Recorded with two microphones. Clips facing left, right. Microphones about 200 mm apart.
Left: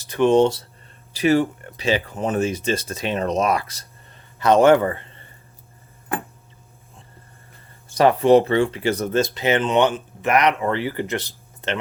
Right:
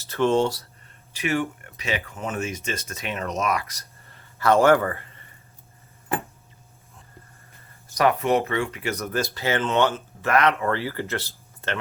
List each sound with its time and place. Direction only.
0.0 s speech: 15° left (ahead or behind)
1.1 s speech: 35° left (ahead or behind)
7.9 s speech: 30° left (ahead or behind)